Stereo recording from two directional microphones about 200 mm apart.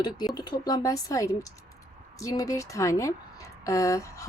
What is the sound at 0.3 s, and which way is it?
A woman's voice, 20° left (ahead or behind).